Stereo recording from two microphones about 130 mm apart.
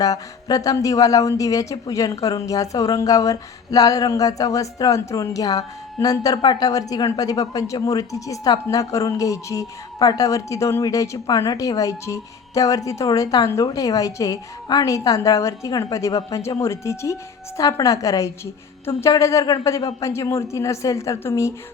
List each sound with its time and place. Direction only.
0.0 s speech: 30° left (ahead or behind)